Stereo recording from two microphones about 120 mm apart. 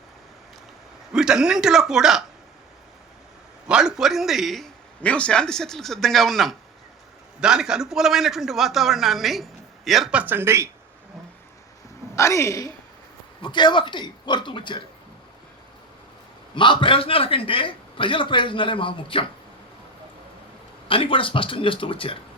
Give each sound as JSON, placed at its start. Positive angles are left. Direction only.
{"t": 1.1, "sound": "a man's voice", "side_deg": -5}
{"t": 3.7, "sound": "a man's voice", "side_deg": -5}
{"t": 12.1, "sound": "a woman's voice", "side_deg": 25}
{"t": 13.4, "sound": "speech", "side_deg": 40}
{"t": 16.6, "sound": "a man's voice", "side_deg": 45}
{"t": 20.8, "sound": "a man's voice", "side_deg": 50}